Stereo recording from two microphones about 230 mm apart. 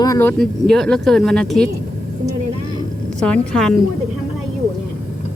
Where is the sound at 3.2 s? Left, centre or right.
Centre.